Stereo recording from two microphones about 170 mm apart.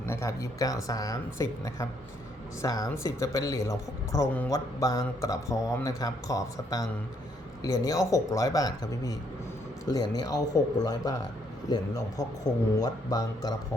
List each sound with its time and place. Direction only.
0.0 s speech: 15° left (ahead or behind)
12.8 s speech: 20° left (ahead or behind)